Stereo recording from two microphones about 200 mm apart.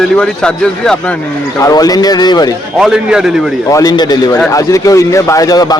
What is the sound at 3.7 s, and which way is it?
Speech, 20° left (ahead or behind).